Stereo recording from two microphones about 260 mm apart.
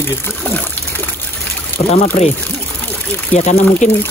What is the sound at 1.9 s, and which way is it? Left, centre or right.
Speech, left.